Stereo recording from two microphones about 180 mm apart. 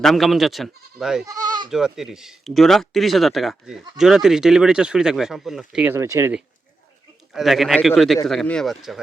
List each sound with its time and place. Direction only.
0.0 s speech: centre (ahead or behind)
1.3 s speech: 20° right (ahead or behind)
1.7 s speech: centre (ahead or behind)
7.3 s speech: centre (ahead or behind)